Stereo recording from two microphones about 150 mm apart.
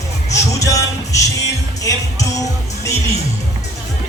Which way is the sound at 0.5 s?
20° left (ahead or behind).